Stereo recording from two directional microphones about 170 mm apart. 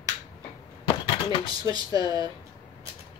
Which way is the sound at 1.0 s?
25° left (ahead or behind).